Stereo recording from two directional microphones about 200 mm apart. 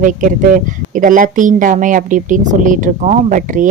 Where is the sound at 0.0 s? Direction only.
40° right (ahead or behind).